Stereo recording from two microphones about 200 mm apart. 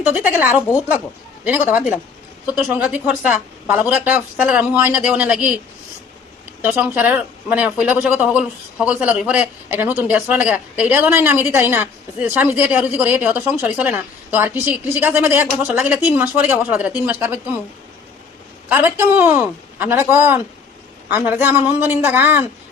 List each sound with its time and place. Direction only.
0.0 s a man's voice: 10° right (ahead or behind)
2.5 s a man's voice: 10° right (ahead or behind)
6.6 s a man's voice: 10° right (ahead or behind)
18.7 s a man's voice: 10° right (ahead or behind)